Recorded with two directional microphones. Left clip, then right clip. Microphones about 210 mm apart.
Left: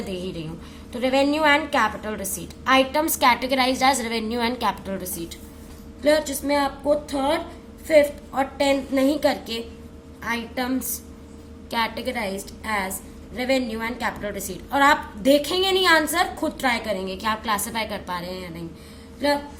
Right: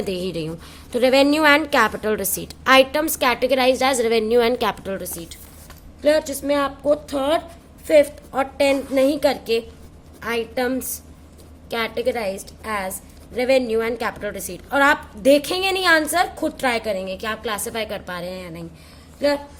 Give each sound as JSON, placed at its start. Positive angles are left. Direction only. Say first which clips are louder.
{"t": 0.0, "sound": "a woman's voice", "louder": "right 6 dB", "side_deg": -50}